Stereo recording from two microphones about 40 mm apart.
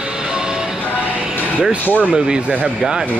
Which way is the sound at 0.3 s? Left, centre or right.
Centre.